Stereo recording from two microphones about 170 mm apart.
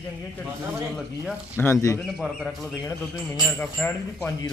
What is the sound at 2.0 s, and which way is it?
Speech, centre (ahead or behind).